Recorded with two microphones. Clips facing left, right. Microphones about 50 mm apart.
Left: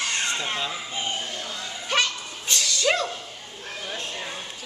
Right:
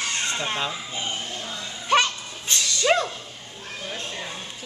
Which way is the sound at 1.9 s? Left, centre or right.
Right.